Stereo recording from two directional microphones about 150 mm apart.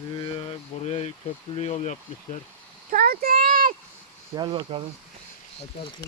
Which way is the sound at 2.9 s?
70° right (ahead or behind).